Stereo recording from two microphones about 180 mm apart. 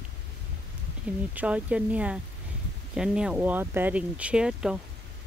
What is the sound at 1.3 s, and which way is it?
Speech, 10° right (ahead or behind).